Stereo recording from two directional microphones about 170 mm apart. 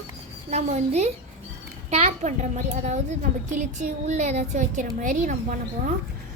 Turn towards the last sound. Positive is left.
turn(degrees=-50)  # may be behind; listen again after turning